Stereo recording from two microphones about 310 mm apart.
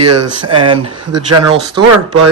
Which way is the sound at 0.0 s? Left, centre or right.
Right.